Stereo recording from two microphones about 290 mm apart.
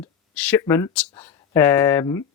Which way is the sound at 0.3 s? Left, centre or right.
Centre.